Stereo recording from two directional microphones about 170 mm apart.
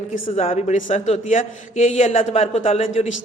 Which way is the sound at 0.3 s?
40° left (ahead or behind).